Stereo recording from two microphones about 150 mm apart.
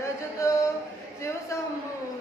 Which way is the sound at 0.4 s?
20° left (ahead or behind).